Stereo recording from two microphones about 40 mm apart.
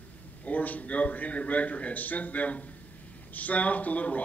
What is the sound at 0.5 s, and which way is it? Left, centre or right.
Speech, left.